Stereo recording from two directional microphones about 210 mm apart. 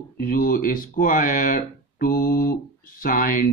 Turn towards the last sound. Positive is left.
turn(degrees=40)  # may be behind; listen again after turning